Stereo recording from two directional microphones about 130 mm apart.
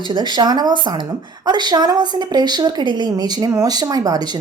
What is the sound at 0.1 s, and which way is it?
A woman's voice, 35° right (ahead or behind).